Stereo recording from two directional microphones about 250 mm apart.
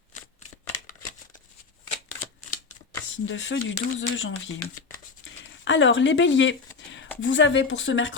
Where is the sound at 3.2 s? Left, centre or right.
Left.